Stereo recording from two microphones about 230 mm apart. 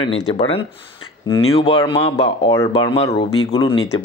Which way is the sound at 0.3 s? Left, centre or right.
Left.